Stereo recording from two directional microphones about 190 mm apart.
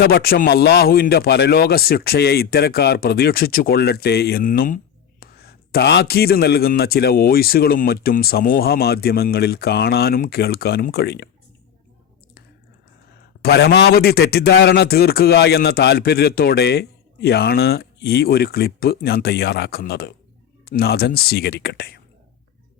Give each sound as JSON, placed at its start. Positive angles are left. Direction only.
{"t": 0.0, "sound": "a man's voice", "side_deg": 55}
{"t": 13.4, "sound": "a man's voice", "side_deg": 55}